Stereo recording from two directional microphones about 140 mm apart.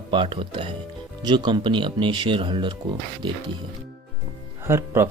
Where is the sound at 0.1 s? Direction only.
35° right (ahead or behind).